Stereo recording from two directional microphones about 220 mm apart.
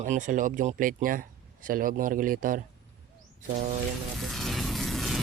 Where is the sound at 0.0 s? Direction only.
35° right (ahead or behind).